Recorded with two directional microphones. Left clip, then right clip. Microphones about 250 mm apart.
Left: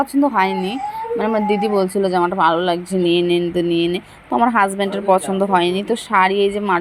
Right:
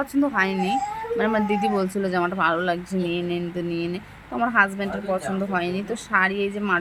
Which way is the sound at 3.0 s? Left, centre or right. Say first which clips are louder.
Left 15 dB; left.